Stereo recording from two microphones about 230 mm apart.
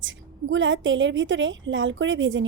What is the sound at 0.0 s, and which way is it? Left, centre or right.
A woman's voice, right.